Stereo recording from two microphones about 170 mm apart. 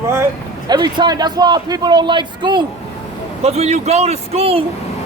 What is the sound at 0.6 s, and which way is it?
A man's voice, 25° right (ahead or behind).